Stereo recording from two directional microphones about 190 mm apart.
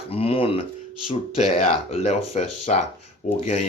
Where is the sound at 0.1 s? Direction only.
30° left (ahead or behind).